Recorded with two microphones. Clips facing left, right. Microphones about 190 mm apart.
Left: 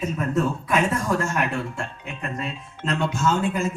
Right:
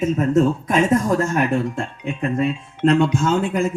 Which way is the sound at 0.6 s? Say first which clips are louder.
Right 6 dB; 50° right (ahead or behind).